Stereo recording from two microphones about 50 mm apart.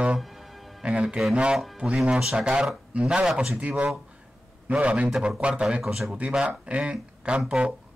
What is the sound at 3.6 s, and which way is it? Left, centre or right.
Speech, right.